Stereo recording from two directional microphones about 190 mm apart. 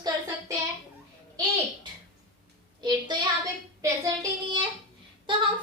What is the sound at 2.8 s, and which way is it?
A woman's voice, 20° right (ahead or behind).